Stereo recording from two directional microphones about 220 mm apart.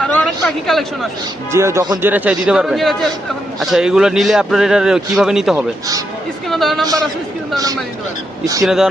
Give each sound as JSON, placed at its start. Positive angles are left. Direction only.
{"t": 0.2, "sound": "a sound", "side_deg": 0}
{"t": 1.5, "sound": "a man's voice", "side_deg": -10}
{"t": 7.5, "sound": "a man's voice", "side_deg": -15}
{"t": 8.6, "sound": "a man's voice", "side_deg": 0}